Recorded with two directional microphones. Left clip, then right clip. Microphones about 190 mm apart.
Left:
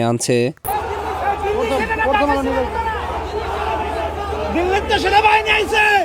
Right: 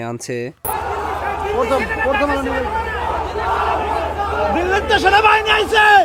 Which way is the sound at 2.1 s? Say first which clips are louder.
Left 1 dB; 10° left (ahead or behind).